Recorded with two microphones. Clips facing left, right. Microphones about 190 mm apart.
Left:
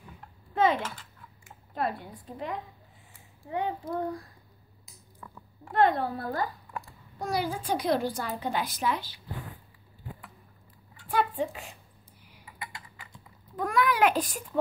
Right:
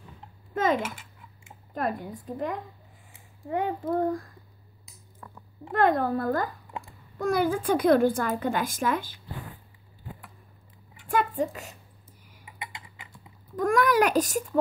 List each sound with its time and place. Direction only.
0.8 s typing: 10° right (ahead or behind)
1.7 s a woman's voice: 45° right (ahead or behind)
5.8 s a woman's voice: 50° right (ahead or behind)
6.7 s babbling: 20° right (ahead or behind)
7.2 s a woman's voice: 55° right (ahead or behind)
11.1 s a sound: 45° right (ahead or behind)
12.4 s typing: 20° right (ahead or behind)
13.6 s a child's voice: 45° right (ahead or behind)